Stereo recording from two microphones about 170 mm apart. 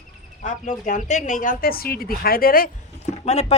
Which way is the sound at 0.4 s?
45° left (ahead or behind).